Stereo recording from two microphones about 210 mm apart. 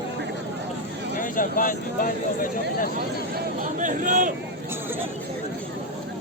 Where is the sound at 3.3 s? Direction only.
40° right (ahead or behind).